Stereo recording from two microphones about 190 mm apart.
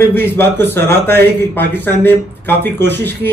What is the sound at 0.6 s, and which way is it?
Speech, 60° right (ahead or behind).